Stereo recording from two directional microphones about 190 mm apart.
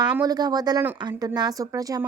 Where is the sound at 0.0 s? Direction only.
20° right (ahead or behind).